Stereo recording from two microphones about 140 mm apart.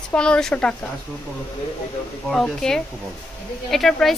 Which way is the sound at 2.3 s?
5° left (ahead or behind).